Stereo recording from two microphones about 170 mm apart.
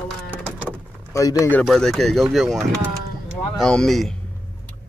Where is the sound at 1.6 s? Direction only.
Centre (ahead or behind).